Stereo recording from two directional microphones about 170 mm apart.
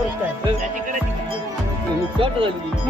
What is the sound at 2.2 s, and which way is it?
Speech, 30° right (ahead or behind).